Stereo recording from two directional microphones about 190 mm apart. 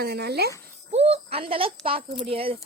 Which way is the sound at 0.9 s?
35° right (ahead or behind).